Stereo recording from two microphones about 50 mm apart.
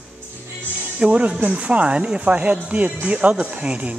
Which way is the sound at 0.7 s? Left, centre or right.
Right.